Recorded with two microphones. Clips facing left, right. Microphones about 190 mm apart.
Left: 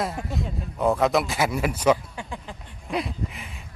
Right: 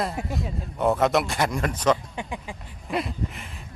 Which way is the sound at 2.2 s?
15° right (ahead or behind).